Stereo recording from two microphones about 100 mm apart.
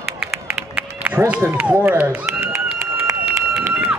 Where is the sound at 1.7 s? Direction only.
20° right (ahead or behind).